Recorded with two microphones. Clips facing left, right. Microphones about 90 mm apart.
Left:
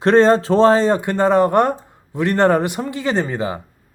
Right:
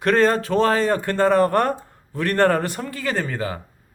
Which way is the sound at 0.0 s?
25° left (ahead or behind).